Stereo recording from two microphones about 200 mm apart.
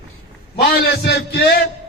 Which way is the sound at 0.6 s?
55° left (ahead or behind).